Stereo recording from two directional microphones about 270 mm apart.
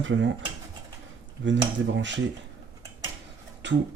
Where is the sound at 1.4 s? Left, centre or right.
Right.